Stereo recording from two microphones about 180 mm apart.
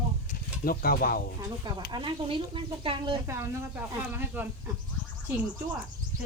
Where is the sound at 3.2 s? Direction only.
15° right (ahead or behind).